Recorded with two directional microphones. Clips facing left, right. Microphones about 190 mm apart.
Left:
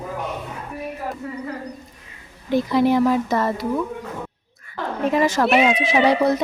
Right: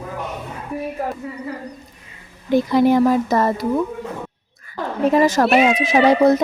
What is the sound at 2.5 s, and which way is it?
Speech, 45° right (ahead or behind).